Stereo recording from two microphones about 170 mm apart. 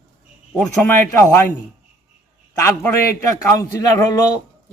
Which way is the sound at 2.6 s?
15° left (ahead or behind).